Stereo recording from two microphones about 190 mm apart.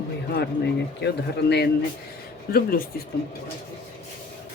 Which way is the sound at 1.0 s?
60° left (ahead or behind).